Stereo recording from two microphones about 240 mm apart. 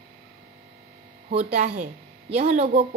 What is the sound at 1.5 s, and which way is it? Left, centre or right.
Speech, right.